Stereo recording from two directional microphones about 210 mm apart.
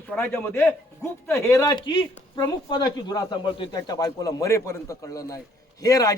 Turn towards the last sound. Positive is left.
turn(degrees=15)  # may be behind; listen again after turning